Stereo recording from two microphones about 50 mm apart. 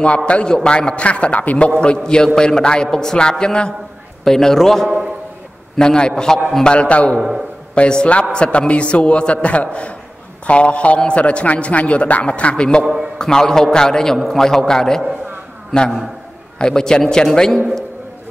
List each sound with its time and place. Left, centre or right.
0.0 s a man's voice: left
2.0 s a man's voice: centre
12.8 s a man's voice: centre
13.2 s a man's voice: centre
16.5 s a man's voice: centre